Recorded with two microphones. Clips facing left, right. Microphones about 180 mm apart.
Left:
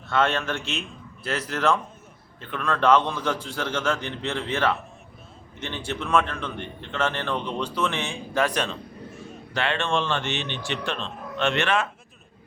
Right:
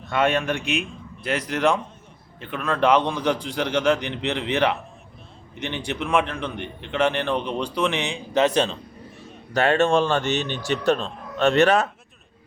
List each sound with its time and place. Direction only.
0.0 s a man's voice: 15° right (ahead or behind)
9.5 s speech: 45° right (ahead or behind)